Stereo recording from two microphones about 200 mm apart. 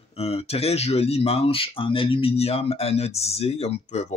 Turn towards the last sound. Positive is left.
turn(degrees=30)  # may be behind; listen again after turning